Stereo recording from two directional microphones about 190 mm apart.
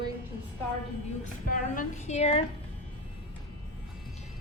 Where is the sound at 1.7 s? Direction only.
40° left (ahead or behind).